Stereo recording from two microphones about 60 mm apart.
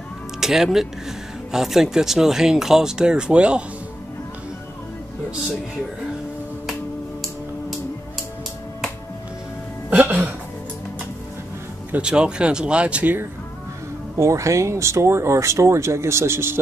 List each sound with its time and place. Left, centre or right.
0.4 s music: centre
1.5 s speech: centre
9.8 s music: right
12.0 s speech: centre
14.1 s speech: right